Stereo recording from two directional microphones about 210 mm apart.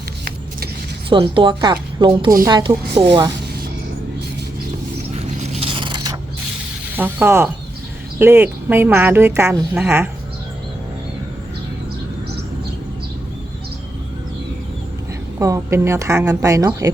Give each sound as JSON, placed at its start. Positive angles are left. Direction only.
{"t": 1.1, "sound": "a woman's voice", "side_deg": -25}
{"t": 5.1, "sound": "zipper", "side_deg": -30}
{"t": 6.9, "sound": "a woman's voice", "side_deg": -10}
{"t": 15.4, "sound": "a woman's voice", "side_deg": -15}